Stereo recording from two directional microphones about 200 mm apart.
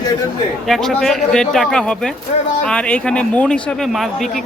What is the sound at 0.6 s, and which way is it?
Speech, centre (ahead or behind).